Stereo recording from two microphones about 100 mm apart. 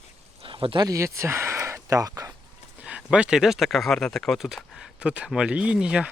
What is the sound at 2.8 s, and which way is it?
Speech, 10° right (ahead or behind).